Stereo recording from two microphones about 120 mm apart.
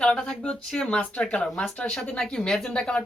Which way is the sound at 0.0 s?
5° left (ahead or behind).